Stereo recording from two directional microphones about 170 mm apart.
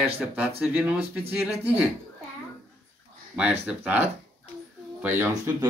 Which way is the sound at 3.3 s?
5° right (ahead or behind).